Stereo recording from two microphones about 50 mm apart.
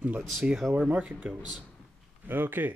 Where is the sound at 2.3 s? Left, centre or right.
Right.